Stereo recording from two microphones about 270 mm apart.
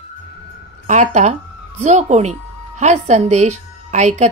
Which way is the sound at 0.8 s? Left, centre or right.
Right.